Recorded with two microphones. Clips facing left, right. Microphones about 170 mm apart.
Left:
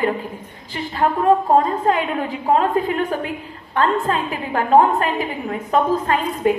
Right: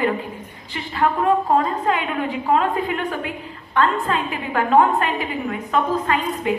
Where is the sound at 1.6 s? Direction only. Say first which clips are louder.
Left 3 dB; 35° left (ahead or behind).